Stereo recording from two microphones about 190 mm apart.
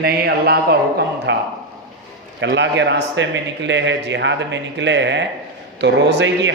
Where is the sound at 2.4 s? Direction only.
70° right (ahead or behind).